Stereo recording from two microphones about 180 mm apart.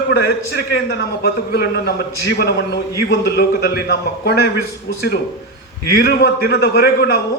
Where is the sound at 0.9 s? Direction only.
60° left (ahead or behind).